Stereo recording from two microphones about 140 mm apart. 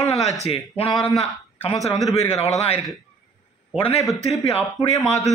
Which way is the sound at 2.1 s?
45° left (ahead or behind).